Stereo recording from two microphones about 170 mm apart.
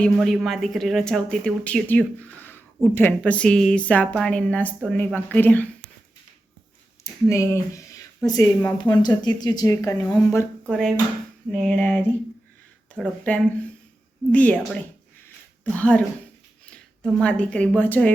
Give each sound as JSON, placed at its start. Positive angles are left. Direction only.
{"t": 0.0, "sound": "speech", "side_deg": 0}
{"t": 7.0, "sound": "a woman's voice", "side_deg": 15}
{"t": 10.7, "sound": "speech", "side_deg": 5}